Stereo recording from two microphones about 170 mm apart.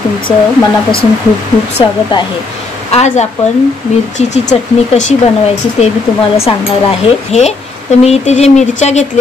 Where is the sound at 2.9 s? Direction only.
40° left (ahead or behind).